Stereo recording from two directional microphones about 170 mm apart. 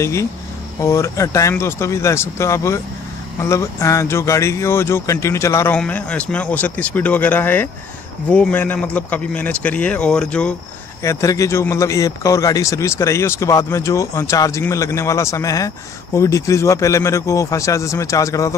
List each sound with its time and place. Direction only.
0.0 s speech: 15° left (ahead or behind)
11.0 s speech: 15° left (ahead or behind)